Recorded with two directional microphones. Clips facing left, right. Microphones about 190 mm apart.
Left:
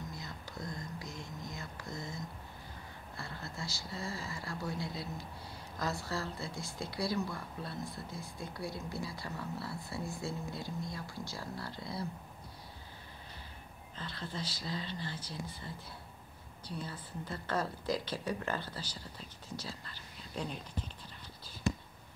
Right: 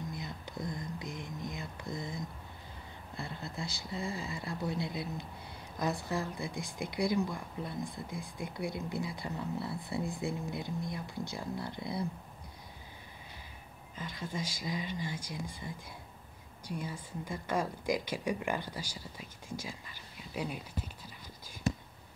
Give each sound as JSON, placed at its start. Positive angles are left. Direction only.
{"t": 0.1, "sound": "whispering", "side_deg": -20}
{"t": 3.2, "sound": "a woman's voice", "side_deg": -20}
{"t": 13.9, "sound": "a woman's voice", "side_deg": -10}